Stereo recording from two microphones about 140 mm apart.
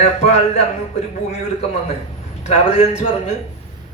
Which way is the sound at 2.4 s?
50° left (ahead or behind).